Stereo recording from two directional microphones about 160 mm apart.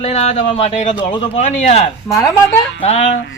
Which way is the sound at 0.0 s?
45° left (ahead or behind).